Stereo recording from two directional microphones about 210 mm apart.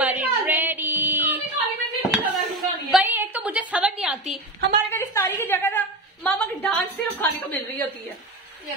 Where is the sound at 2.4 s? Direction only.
Centre (ahead or behind).